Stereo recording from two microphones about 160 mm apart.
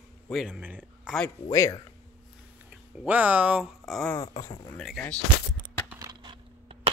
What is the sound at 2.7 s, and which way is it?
Speech, 5° right (ahead or behind).